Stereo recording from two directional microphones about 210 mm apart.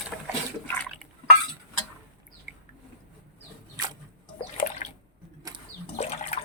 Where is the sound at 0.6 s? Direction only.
10° left (ahead or behind).